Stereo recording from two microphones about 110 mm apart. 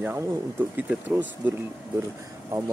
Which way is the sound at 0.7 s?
15° right (ahead or behind).